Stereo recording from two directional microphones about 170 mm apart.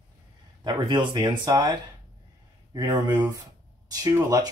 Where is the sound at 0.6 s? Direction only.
25° right (ahead or behind).